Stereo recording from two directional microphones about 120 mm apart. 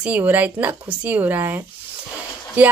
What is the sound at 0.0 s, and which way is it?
A woman's voice, 15° right (ahead or behind).